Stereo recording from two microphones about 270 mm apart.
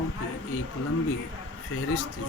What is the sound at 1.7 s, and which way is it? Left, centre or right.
Speech, left.